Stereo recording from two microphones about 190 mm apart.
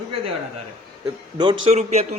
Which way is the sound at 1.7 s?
35° right (ahead or behind).